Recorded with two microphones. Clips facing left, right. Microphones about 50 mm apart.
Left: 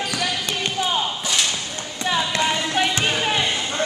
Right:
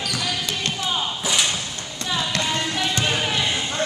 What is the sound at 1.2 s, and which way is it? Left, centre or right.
Thump, centre.